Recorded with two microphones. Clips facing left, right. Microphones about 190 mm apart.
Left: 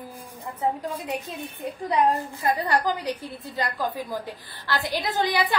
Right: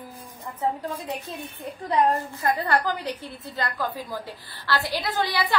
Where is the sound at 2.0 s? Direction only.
15° left (ahead or behind).